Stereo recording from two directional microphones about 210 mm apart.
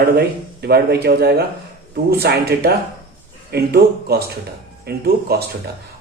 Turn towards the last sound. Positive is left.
turn(degrees=-50)  # may be behind; listen again after turning